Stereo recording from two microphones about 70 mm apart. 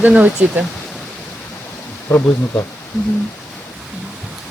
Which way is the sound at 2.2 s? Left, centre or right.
Left.